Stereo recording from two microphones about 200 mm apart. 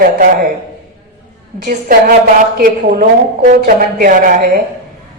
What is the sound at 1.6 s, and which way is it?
A woman's voice, 45° right (ahead or behind).